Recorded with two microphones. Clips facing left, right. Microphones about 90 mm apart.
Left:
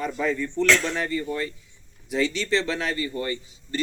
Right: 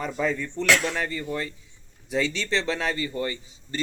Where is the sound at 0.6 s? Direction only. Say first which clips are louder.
Left 1 dB; 15° right (ahead or behind).